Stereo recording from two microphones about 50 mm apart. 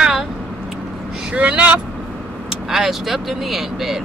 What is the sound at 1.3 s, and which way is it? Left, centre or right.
Speech, right.